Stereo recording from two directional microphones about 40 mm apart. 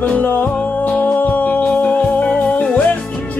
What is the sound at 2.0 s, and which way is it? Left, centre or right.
Music, left.